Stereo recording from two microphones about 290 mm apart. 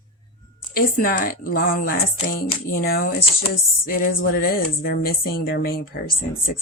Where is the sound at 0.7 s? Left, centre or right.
Left.